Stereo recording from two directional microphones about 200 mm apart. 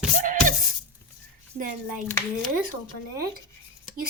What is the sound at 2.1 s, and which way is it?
Speech, 10° left (ahead or behind).